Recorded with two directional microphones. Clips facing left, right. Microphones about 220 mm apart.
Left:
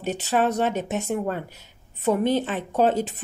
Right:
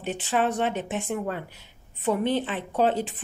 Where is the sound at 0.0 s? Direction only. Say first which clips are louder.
Left 3 dB; 40° left (ahead or behind).